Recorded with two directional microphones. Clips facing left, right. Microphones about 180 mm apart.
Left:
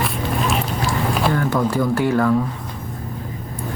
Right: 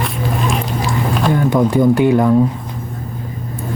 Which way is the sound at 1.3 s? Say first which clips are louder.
Right 9 dB; 20° right (ahead or behind).